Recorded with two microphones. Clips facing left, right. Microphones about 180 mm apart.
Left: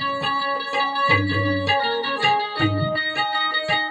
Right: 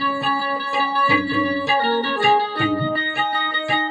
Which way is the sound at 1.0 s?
50° right (ahead or behind).